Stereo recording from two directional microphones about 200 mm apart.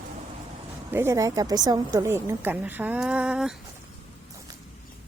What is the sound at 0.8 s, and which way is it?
A woman's voice, 10° right (ahead or behind).